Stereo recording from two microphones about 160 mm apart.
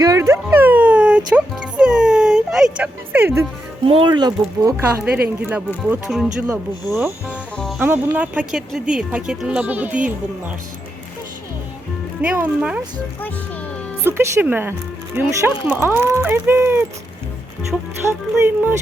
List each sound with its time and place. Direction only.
0.0 s music: 20° right (ahead or behind)
3.8 s speech: 30° right (ahead or behind)
5.4 s speech: 10° right (ahead or behind)
7.5 s music: centre (ahead or behind)
7.8 s speech: 10° right (ahead or behind)
12.2 s speech: 10° right (ahead or behind)
14.0 s speech: 15° right (ahead or behind)
18.1 s speech: 15° right (ahead or behind)